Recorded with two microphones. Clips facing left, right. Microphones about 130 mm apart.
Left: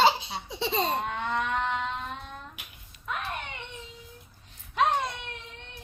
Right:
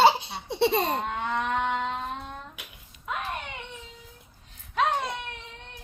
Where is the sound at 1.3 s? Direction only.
10° right (ahead or behind).